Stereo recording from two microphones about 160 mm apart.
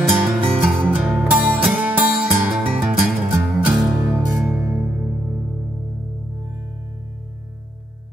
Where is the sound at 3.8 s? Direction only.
20° right (ahead or behind).